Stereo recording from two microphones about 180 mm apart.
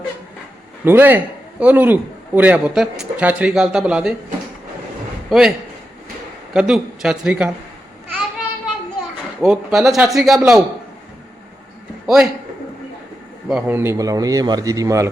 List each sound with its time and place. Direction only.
0.9 s a man's voice: 10° right (ahead or behind)
5.3 s a man's voice: 5° right (ahead or behind)
9.4 s a man's voice: centre (ahead or behind)
12.0 s a man's voice: 5° right (ahead or behind)
13.5 s a man's voice: 10° right (ahead or behind)